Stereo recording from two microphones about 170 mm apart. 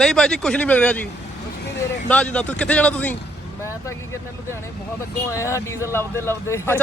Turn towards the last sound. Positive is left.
turn(degrees=15)  # may be behind; listen again after turning